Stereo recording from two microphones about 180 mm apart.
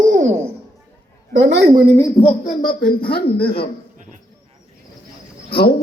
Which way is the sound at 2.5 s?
50° left (ahead or behind).